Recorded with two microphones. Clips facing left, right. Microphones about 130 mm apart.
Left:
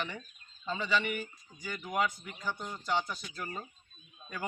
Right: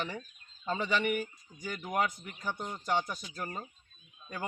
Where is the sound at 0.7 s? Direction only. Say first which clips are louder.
Right 2 dB; 45° right (ahead or behind).